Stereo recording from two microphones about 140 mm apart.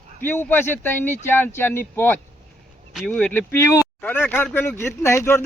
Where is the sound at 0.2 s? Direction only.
15° left (ahead or behind).